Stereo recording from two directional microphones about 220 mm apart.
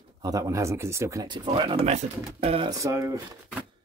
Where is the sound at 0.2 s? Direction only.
15° right (ahead or behind).